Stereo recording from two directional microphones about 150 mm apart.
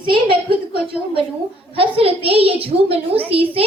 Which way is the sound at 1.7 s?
40° right (ahead or behind).